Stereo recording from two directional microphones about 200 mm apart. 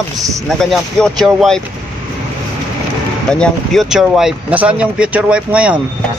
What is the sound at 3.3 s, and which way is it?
Speech, 5° left (ahead or behind).